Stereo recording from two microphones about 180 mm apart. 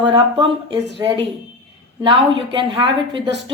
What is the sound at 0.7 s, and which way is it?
Speech, 75° right (ahead or behind).